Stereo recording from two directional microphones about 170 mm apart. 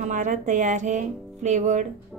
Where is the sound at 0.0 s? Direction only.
45° right (ahead or behind).